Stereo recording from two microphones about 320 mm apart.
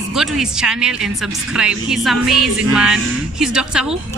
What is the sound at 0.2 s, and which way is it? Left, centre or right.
A man's voice, centre.